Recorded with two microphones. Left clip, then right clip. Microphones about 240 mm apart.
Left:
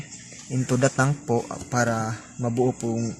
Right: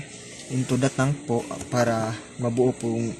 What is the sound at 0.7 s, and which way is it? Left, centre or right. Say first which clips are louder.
Speech: left 3 dB; left.